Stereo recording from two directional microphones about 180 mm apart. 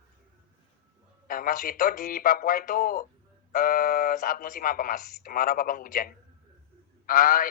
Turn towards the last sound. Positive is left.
turn(degrees=50)  # may be behind; listen again after turning